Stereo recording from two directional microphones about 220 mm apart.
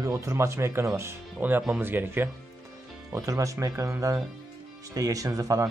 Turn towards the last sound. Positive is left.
turn(degrees=-15)  # may be behind; listen again after turning